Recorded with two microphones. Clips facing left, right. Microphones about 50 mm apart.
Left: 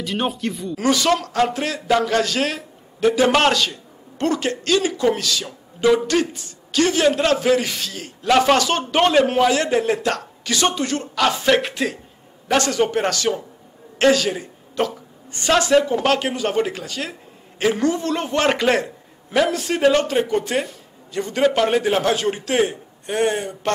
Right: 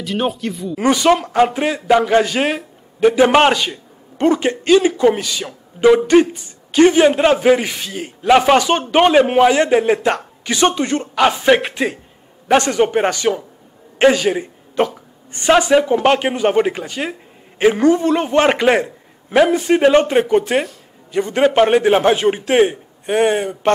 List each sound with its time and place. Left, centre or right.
0.0 s speech: centre
0.7 s a woman's voice: right